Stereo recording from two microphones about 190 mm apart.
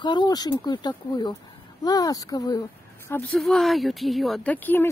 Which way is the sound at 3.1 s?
10° left (ahead or behind).